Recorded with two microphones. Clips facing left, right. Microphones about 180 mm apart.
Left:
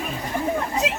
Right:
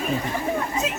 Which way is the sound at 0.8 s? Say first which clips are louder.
Left 2 dB; 85° left.